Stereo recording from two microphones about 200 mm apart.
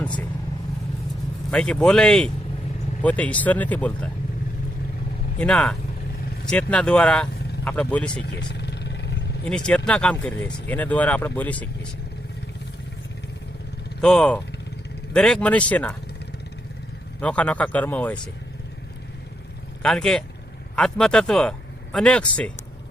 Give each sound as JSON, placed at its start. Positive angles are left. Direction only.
{"t": 1.5, "sound": "speech", "side_deg": 5}
{"t": 5.4, "sound": "speech", "side_deg": 5}
{"t": 8.2, "sound": "vehicle", "side_deg": 55}
{"t": 9.4, "sound": "speech", "side_deg": 5}
{"t": 14.0, "sound": "speech", "side_deg": 5}
{"t": 17.2, "sound": "speech", "side_deg": 5}
{"t": 19.8, "sound": "speech", "side_deg": 5}